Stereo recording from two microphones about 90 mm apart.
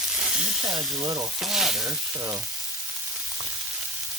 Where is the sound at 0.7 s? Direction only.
50° right (ahead or behind).